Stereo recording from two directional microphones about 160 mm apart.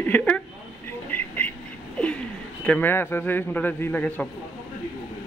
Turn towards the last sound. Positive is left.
turn(degrees=10)  # may be behind; listen again after turning